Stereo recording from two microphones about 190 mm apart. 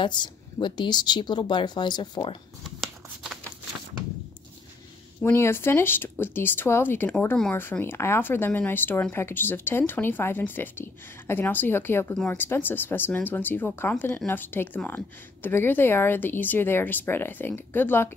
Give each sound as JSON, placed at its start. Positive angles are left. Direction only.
{"t": 0.0, "sound": "speech", "side_deg": 25}
{"t": 5.2, "sound": "speech", "side_deg": 10}